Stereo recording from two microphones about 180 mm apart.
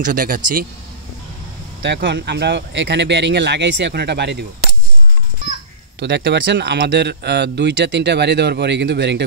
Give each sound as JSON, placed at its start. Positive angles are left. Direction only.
{"t": 0.0, "sound": "speech", "side_deg": -50}
{"t": 1.8, "sound": "speech", "side_deg": -70}
{"t": 5.9, "sound": "speech", "side_deg": -70}